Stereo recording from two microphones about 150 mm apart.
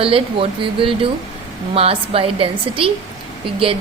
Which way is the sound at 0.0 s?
35° right (ahead or behind).